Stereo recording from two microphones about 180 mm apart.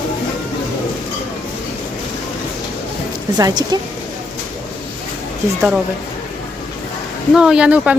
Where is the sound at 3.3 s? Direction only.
20° right (ahead or behind).